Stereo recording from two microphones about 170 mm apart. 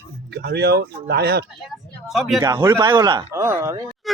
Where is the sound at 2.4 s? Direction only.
20° right (ahead or behind).